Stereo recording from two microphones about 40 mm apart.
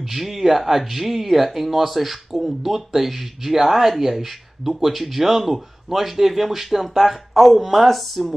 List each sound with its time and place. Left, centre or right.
0.0 s speech: centre